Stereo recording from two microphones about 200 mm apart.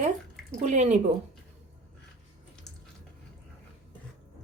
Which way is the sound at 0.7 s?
35° right (ahead or behind).